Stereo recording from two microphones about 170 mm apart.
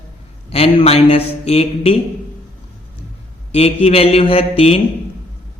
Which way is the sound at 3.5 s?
35° left (ahead or behind).